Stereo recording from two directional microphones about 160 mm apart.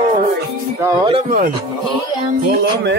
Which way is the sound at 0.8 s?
30° right (ahead or behind).